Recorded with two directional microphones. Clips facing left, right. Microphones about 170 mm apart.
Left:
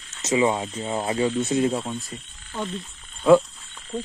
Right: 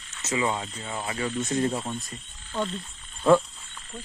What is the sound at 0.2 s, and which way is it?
Speech, 20° left (ahead or behind).